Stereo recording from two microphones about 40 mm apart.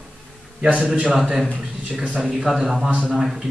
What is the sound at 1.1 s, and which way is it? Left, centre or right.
Speech, centre.